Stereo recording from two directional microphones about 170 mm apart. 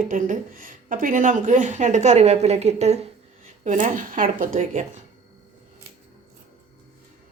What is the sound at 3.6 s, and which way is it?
A woman's voice, 50° right (ahead or behind).